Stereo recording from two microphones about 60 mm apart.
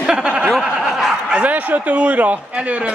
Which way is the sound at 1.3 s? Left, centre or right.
Right.